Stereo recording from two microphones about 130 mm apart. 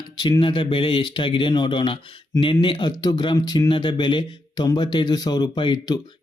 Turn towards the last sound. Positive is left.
turn(degrees=35)  # may be behind; listen again after turning